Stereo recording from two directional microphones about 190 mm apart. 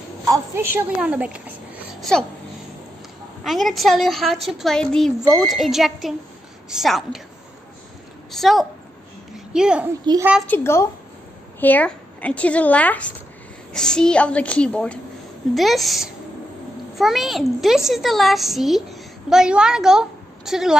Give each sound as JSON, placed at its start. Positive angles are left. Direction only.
{"t": 0.3, "sound": "a woman's voice", "side_deg": -15}
{"t": 3.4, "sound": "a woman's voice", "side_deg": 0}
{"t": 8.3, "sound": "a woman's voice", "side_deg": 0}
{"t": 10.1, "sound": "a woman's voice", "side_deg": -25}
{"t": 10.4, "sound": "a woman's voice", "side_deg": 10}